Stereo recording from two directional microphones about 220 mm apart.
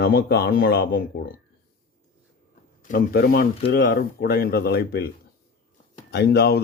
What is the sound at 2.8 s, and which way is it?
A man's voice, 40° left (ahead or behind).